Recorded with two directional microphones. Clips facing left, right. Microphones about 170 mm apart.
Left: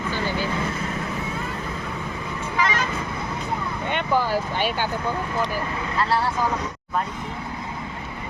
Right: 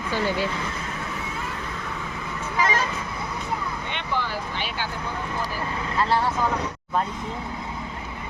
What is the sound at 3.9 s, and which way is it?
Speech, 45° left (ahead or behind).